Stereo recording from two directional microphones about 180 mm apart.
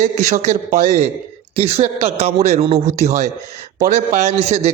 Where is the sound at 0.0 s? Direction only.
40° right (ahead or behind).